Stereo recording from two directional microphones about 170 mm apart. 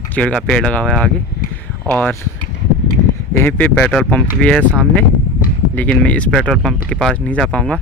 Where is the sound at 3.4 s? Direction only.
10° left (ahead or behind).